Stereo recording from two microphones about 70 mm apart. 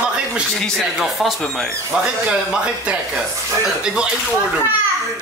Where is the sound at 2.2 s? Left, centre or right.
Centre.